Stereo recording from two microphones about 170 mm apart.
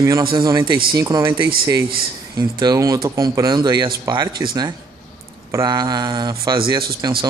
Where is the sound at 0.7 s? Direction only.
60° right (ahead or behind).